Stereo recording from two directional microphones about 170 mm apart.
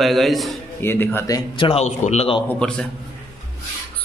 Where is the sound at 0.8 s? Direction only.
10° left (ahead or behind); by 1.8 s 30° left (ahead or behind).